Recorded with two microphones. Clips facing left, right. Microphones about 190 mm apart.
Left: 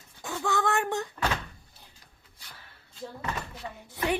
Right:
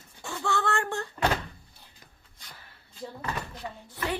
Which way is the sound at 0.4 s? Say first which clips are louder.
Left 1 dB; 15° left (ahead or behind).